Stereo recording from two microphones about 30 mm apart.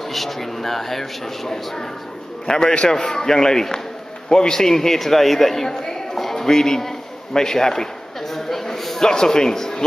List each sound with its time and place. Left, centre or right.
0.1 s a man's voice: centre
8.3 s a sound: centre
9.0 s speech: left